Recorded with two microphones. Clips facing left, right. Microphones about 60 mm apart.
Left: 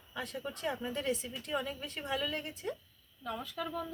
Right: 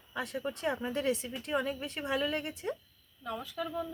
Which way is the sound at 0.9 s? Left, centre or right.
Right.